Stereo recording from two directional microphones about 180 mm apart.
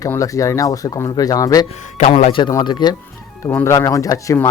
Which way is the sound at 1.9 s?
40° left (ahead or behind).